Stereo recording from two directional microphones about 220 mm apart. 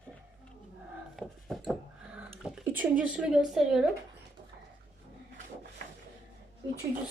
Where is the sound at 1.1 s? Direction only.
Centre (ahead or behind).